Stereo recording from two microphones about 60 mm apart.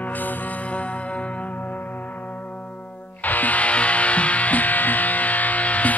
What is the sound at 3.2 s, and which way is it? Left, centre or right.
Music, left.